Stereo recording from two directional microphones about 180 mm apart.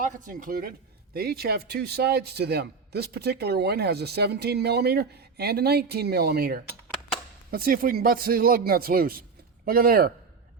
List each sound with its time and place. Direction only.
0.0 s a man's voice: 45° right (ahead or behind)